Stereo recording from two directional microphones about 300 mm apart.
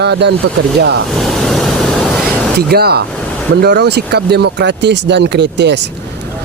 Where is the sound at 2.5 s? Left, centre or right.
Right.